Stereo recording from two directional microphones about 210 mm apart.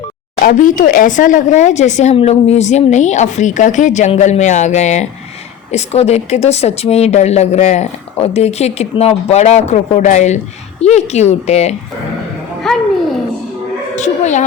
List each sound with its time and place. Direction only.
0.4 s speech: 40° left (ahead or behind)
12.7 s a sound: centre (ahead or behind)
13.9 s speech: 35° left (ahead or behind)